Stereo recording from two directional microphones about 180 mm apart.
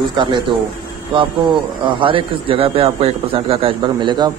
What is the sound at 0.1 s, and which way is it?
Speech, 25° right (ahead or behind).